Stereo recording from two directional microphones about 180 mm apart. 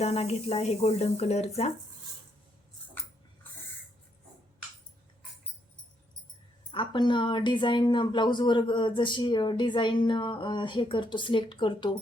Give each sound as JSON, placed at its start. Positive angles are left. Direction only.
{"t": 0.0, "sound": "speech", "side_deg": 35}
{"t": 6.7, "sound": "speech", "side_deg": 25}